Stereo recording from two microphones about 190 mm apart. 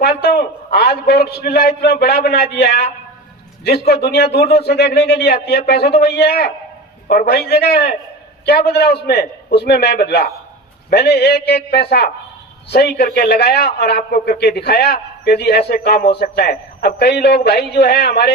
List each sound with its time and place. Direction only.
0.0 s a man's voice: 55° left (ahead or behind)